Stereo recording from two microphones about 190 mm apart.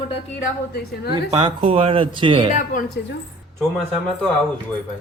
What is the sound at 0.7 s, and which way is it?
Speech, 60° left (ahead or behind).